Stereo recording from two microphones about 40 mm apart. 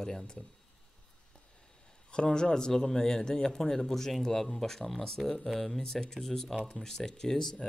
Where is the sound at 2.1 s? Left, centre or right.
Left; by 5.8 s centre.